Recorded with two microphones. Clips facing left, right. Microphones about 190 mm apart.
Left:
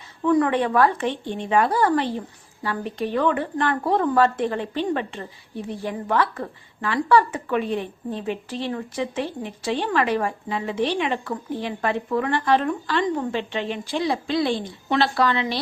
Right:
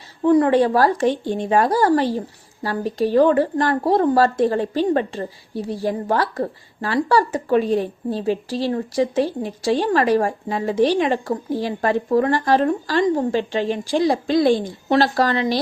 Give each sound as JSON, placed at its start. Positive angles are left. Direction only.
{"t": 0.2, "sound": "a woman's voice", "side_deg": -30}